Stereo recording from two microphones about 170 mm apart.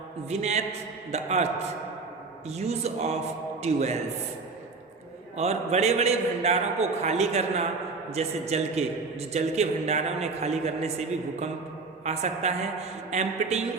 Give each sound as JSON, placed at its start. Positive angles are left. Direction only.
{"t": 0.3, "sound": "a man's voice", "side_deg": -40}
{"t": 2.5, "sound": "a man's voice", "side_deg": -40}
{"t": 5.4, "sound": "a man's voice", "side_deg": -40}